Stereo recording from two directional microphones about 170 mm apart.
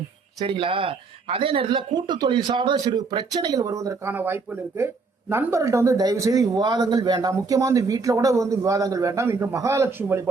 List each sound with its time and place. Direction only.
0.4 s speech: 30° right (ahead or behind); by 10.2 s 15° right (ahead or behind)